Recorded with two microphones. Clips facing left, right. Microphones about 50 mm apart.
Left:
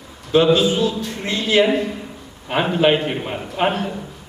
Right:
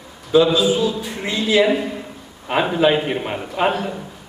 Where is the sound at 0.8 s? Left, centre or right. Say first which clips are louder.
Even; centre.